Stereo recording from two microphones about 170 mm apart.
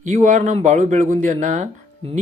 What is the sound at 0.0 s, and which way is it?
Speech, 50° right (ahead or behind).